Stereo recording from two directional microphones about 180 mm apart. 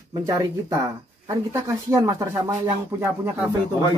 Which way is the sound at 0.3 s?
20° right (ahead or behind).